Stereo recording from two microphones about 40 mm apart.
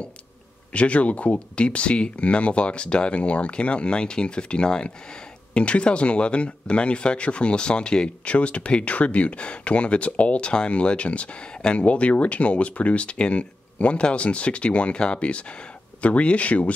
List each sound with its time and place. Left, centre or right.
0.7 s speech: left
8.3 s speech: left